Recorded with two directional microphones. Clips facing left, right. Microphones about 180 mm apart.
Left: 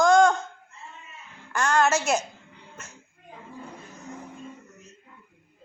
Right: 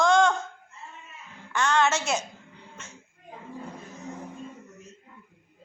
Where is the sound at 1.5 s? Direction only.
10° left (ahead or behind).